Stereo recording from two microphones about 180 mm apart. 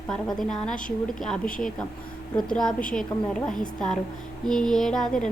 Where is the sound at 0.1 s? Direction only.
Centre (ahead or behind).